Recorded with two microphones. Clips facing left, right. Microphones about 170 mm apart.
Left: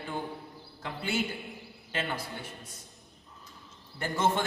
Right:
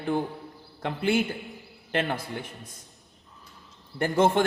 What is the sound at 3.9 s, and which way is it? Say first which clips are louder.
Speech: right 7 dB; 60° right (ahead or behind).